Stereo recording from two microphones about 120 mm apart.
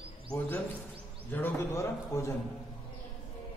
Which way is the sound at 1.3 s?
20° left (ahead or behind).